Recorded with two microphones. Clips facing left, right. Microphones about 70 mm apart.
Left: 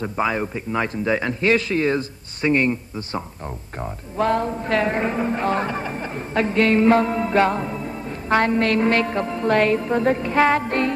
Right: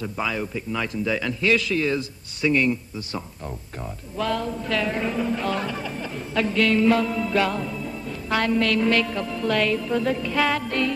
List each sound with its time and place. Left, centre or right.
0.0 s speech: left